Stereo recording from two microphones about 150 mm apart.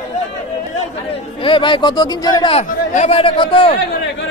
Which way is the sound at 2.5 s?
45° left (ahead or behind).